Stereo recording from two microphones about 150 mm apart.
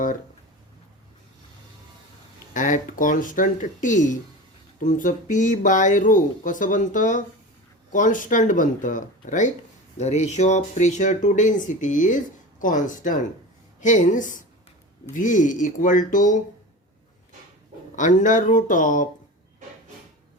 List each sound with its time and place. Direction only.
2.5 s speech: 60° left (ahead or behind)
17.9 s speech: 60° left (ahead or behind)